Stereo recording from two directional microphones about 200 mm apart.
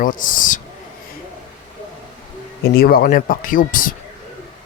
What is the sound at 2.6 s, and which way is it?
Speech, 50° left (ahead or behind).